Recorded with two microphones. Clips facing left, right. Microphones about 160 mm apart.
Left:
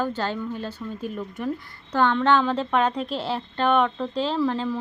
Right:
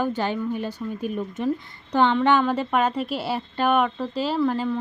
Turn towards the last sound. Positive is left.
turn(degrees=-5)  # may be behind; listen again after turning